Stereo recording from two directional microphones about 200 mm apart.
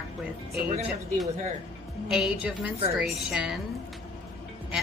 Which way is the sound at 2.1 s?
Centre (ahead or behind).